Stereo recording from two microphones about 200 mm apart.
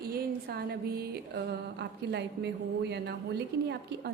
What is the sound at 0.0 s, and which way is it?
A woman's voice, 50° right (ahead or behind).